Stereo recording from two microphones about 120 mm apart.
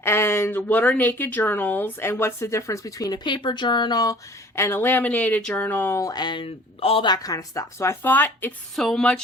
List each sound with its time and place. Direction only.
0.0 s speech: 20° left (ahead or behind); by 7.1 s 50° left (ahead or behind)
7.1 s speech: 30° left (ahead or behind)
8.7 s speech: 5° left (ahead or behind)